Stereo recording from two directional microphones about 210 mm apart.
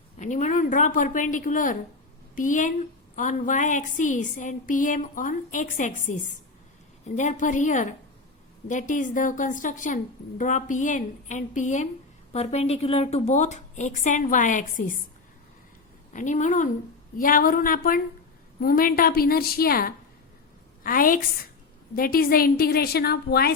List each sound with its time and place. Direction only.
0.2 s a woman's voice: 35° left (ahead or behind)
16.1 s a woman's voice: 35° left (ahead or behind)